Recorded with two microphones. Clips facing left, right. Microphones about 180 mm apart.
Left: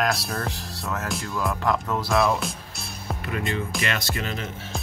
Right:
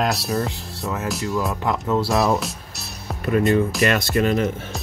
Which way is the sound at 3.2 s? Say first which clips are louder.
Right 12 dB; 40° right (ahead or behind).